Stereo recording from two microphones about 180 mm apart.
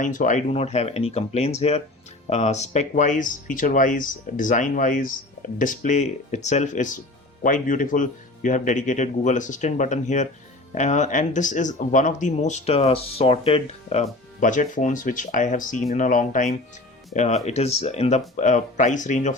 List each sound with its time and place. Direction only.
0.0 s speech: 45° left (ahead or behind)